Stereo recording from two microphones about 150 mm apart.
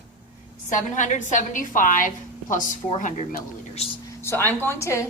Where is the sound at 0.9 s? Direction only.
55° left (ahead or behind).